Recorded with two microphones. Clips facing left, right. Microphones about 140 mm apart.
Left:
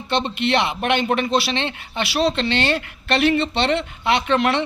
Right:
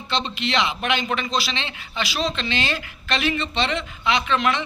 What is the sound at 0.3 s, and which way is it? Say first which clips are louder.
Speech: left 4 dB; 55° left (ahead or behind).